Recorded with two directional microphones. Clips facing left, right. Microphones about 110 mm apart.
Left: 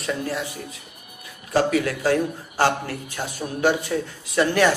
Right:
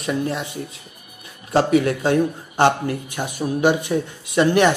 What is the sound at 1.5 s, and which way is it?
A man's voice, 25° right (ahead or behind).